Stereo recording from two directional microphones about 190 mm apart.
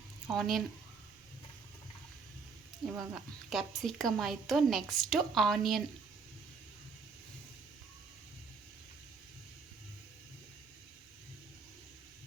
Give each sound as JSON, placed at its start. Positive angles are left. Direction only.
{"t": 0.3, "sound": "speech", "side_deg": 0}
{"t": 2.8, "sound": "speech", "side_deg": -5}